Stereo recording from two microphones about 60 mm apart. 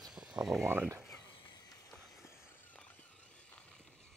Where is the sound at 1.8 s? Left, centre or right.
Left.